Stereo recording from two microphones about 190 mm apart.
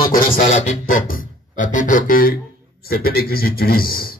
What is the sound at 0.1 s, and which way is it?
A man's voice, 45° left (ahead or behind).